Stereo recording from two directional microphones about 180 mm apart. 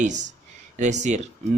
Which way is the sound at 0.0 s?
40° right (ahead or behind).